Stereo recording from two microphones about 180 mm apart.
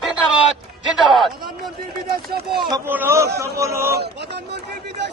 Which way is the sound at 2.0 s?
55° right (ahead or behind).